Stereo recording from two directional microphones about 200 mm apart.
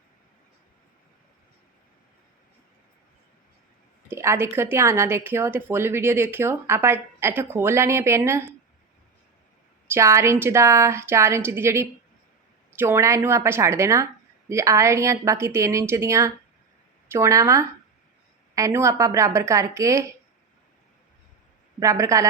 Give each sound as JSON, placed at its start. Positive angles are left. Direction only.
{"t": 4.1, "sound": "a woman's voice", "side_deg": -15}
{"t": 9.8, "sound": "a woman's voice", "side_deg": -15}
{"t": 21.8, "sound": "a woman's voice", "side_deg": -15}